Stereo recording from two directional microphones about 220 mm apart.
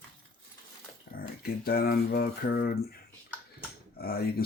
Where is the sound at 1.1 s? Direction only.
40° left (ahead or behind).